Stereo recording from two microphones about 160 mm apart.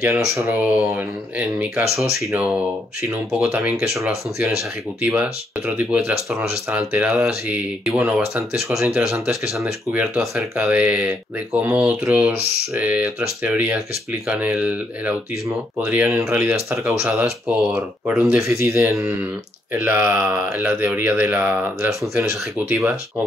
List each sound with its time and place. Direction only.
0.4 s speech: 10° right (ahead or behind)